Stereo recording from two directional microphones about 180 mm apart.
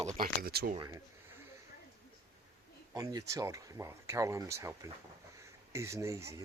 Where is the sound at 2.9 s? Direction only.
20° right (ahead or behind).